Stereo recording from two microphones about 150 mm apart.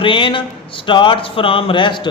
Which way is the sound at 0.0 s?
35° left (ahead or behind).